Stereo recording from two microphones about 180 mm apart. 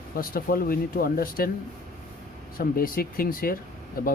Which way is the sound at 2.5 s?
55° left (ahead or behind).